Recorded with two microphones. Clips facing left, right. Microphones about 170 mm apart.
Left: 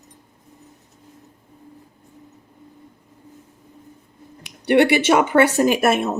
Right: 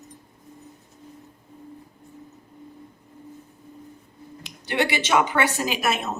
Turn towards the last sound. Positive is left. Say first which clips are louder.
# left 8 dB
turn(degrees=55)  # may be behind; listen again after turning